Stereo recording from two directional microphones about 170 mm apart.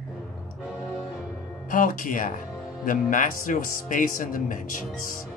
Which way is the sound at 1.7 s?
50° left (ahead or behind).